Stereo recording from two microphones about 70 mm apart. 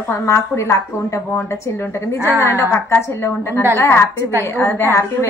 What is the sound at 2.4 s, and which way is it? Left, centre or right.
A woman's voice, left.